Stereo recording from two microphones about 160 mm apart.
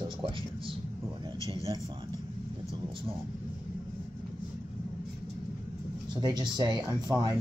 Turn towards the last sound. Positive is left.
turn(degrees=-25)  # may be behind; listen again after turning